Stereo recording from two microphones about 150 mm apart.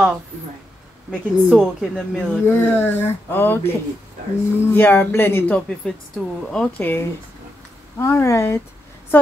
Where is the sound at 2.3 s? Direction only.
15° left (ahead or behind).